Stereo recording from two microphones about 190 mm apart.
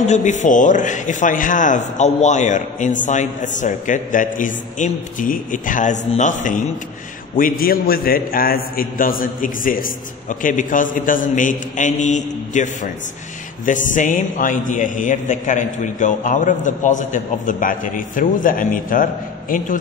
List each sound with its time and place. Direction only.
0.0 s a man's voice: 40° left (ahead or behind)